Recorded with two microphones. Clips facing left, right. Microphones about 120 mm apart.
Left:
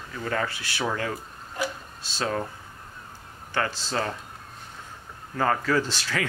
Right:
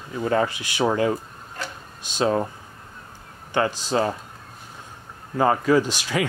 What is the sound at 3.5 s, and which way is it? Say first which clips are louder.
Speech: right 6 dB; 15° right (ahead or behind).